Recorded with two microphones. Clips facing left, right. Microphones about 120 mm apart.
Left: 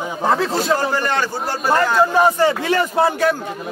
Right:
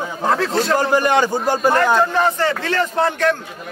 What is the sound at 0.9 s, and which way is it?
Speech, 15° right (ahead or behind).